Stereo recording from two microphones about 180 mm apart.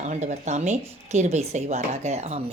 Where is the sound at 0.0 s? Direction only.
40° right (ahead or behind).